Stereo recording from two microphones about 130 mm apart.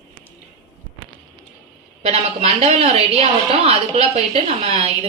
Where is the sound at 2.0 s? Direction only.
55° right (ahead or behind).